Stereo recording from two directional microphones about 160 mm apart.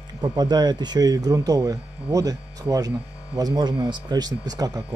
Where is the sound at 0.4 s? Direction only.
25° right (ahead or behind).